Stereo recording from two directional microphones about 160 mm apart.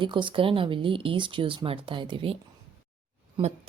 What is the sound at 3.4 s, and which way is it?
Speech, 30° right (ahead or behind).